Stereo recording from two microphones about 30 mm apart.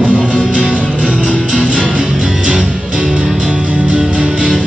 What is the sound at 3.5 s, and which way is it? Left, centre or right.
Music, right.